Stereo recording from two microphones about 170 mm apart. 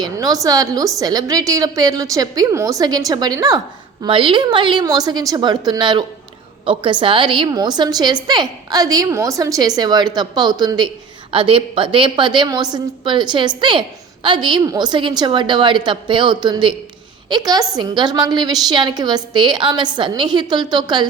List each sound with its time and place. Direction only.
0.0 s a woman's voice: 20° right (ahead or behind)